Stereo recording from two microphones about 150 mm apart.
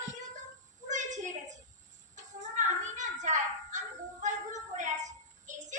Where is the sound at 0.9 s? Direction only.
55° right (ahead or behind).